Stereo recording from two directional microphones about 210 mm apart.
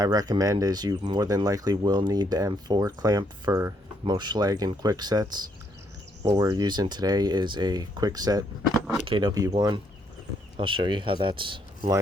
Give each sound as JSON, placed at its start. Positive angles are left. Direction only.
{"t": 0.0, "sound": "speech", "side_deg": -20}